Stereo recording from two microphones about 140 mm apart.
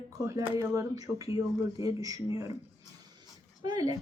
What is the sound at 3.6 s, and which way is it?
Speech, 25° right (ahead or behind).